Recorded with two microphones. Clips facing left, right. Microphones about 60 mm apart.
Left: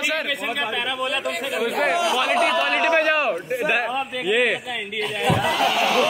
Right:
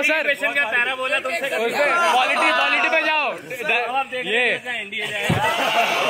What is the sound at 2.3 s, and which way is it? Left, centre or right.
Speech, right.